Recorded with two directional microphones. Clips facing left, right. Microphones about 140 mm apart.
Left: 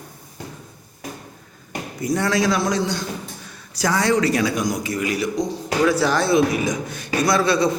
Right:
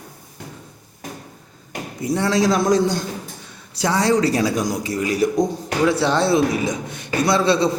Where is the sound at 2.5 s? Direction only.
45° right (ahead or behind).